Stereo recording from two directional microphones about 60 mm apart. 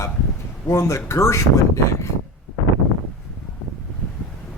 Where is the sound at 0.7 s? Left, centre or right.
Left.